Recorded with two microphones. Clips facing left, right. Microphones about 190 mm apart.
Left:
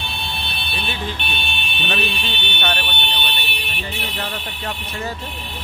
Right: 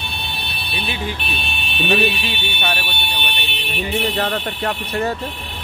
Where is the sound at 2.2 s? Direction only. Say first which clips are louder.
Right 1 dB; 10° right (ahead or behind).